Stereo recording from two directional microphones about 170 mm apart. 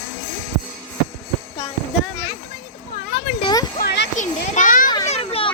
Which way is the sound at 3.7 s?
80° left.